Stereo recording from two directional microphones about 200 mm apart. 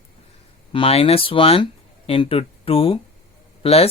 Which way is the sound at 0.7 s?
30° left (ahead or behind).